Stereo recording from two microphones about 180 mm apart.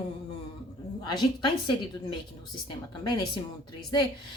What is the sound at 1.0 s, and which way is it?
Speech, 25° left (ahead or behind).